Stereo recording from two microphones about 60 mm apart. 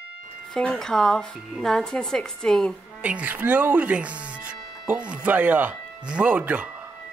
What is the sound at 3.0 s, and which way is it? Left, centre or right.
Speech, right.